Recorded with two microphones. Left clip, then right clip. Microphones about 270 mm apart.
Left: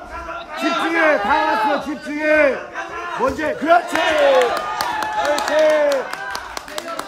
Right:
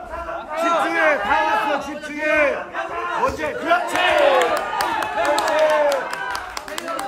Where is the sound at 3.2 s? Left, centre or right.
Left.